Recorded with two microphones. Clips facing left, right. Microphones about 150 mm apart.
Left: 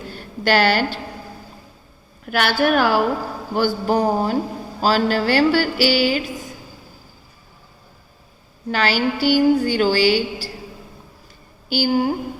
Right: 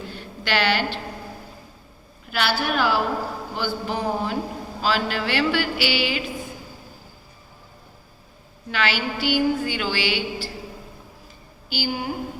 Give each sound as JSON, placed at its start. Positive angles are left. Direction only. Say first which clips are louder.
{"t": 0.1, "sound": "a sound", "louder": "left 8 dB", "side_deg": 45}
{"t": 2.2, "sound": "a man's voice", "louder": "left 6 dB", "side_deg": 50}
{"t": 8.7, "sound": "a woman's voice", "louder": "left 5 dB", "side_deg": 40}
{"t": 11.7, "sound": "a woman's voice", "louder": "left 9 dB", "side_deg": 40}